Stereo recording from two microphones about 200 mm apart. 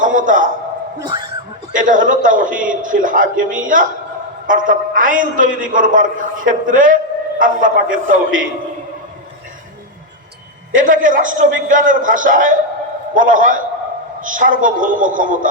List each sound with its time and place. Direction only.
0.0 s a sound: 40° right (ahead or behind)
0.9 s speech: 20° right (ahead or behind)
1.7 s a man's voice: 40° right (ahead or behind)
10.7 s a man's voice: 40° right (ahead or behind)